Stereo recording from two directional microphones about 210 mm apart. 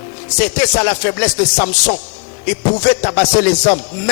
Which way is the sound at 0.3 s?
10° left (ahead or behind).